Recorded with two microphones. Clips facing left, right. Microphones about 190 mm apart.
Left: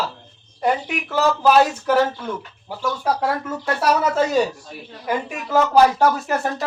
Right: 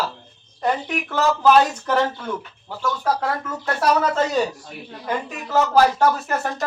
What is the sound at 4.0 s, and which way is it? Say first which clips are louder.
Speech: left 2 dB; 10° left (ahead or behind).